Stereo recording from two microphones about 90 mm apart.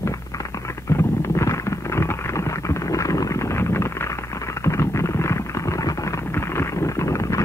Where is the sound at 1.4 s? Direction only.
30° left (ahead or behind).